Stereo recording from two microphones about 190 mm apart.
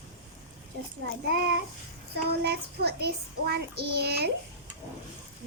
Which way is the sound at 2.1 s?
60° right (ahead or behind).